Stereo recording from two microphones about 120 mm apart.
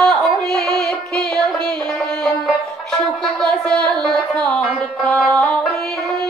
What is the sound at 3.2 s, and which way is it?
Music, 10° left (ahead or behind).